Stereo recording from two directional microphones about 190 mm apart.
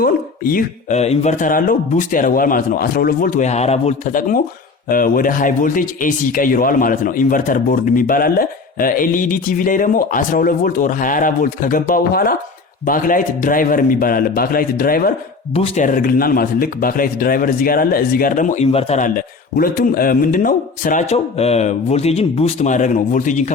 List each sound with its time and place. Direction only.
0.0 s speech: 50° left (ahead or behind)
15.5 s speech: 35° left (ahead or behind)